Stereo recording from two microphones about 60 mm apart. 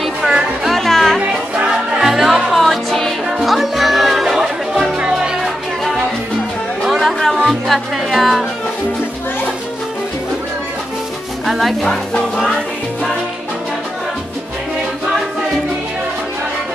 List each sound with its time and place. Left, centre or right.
0.7 s music: centre
1.2 s music: centre
2.0 s music: centre
6.8 s chatter: centre
7.3 s music: centre
11.4 s speech: centre